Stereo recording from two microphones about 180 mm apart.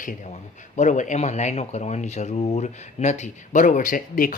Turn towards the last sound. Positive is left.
turn(degrees=50)  # may be behind; listen again after turning